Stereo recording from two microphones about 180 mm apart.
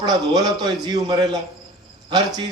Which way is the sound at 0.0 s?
20° right (ahead or behind).